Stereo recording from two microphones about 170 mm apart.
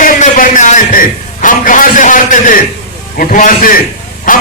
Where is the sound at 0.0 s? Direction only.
50° left (ahead or behind).